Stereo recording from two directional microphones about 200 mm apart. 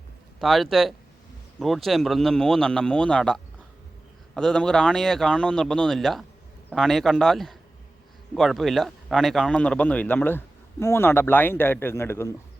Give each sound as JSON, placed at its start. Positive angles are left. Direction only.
{"t": 0.3, "sound": "speech", "side_deg": 0}